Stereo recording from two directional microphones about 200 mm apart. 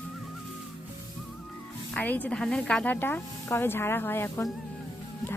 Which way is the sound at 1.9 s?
10° left (ahead or behind).